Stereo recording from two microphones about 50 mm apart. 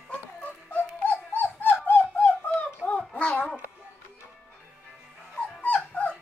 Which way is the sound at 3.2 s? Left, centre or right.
Left.